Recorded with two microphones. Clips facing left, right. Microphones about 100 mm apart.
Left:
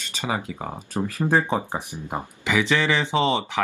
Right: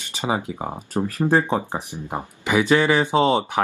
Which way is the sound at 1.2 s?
5° left (ahead or behind).